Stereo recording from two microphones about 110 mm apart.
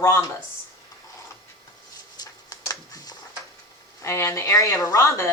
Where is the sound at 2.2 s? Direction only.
35° left (ahead or behind).